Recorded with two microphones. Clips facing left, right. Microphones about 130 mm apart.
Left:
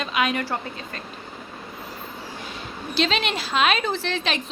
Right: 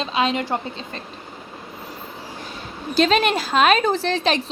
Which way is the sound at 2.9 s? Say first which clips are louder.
Right 6 dB; 45° right (ahead or behind).